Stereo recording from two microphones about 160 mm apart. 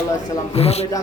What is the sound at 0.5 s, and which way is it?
Speech, 40° left (ahead or behind).